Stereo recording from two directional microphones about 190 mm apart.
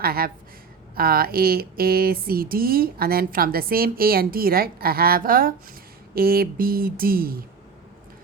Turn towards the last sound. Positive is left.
turn(degrees=-50)  # may be behind; listen again after turning